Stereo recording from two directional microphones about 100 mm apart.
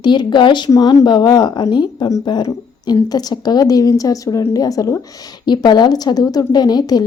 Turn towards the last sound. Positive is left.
turn(degrees=40)  # may be behind; listen again after turning